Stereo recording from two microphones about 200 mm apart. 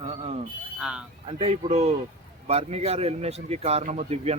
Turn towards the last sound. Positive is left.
turn(degrees=-35)  # may be behind; listen again after turning